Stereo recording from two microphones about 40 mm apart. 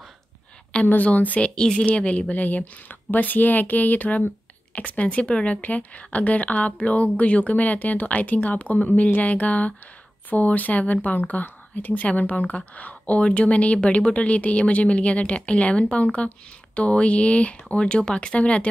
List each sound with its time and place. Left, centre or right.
1.0 s speech: left
1.5 s speech: left
1.9 s speech: left
4.7 s speech: left